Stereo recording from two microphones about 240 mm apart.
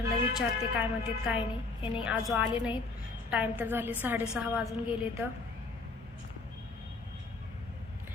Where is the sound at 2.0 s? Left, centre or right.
Centre.